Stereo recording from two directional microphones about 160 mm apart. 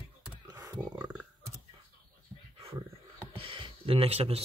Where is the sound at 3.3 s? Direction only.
35° right (ahead or behind).